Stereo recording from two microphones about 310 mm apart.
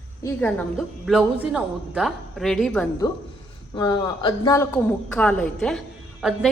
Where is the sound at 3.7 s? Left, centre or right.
Centre.